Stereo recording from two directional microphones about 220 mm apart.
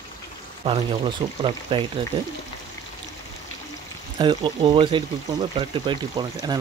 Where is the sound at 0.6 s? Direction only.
25° right (ahead or behind).